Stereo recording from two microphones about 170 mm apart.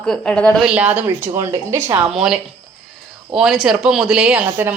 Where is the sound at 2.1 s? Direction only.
5° right (ahead or behind).